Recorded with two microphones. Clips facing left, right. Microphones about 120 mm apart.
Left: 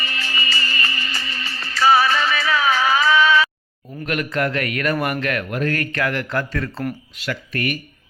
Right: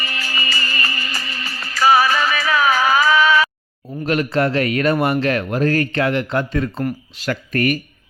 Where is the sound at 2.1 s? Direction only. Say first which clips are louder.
Right 2 dB; 45° right (ahead or behind).